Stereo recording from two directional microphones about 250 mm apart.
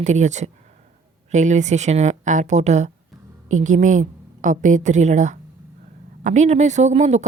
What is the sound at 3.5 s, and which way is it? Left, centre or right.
A woman's voice, right.